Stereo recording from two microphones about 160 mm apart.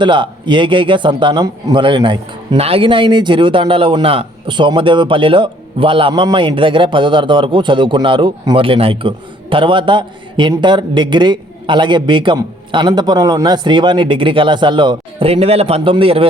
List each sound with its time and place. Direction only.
0.0 s a man's voice: 30° right (ahead or behind)